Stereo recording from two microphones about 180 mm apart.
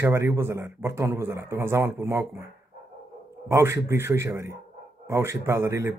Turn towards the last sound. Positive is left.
turn(degrees=-15)  # may be behind; listen again after turning